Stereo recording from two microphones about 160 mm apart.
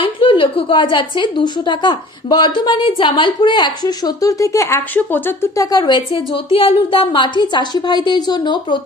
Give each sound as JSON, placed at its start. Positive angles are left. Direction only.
{"t": 0.0, "sound": "a woman's voice", "side_deg": 35}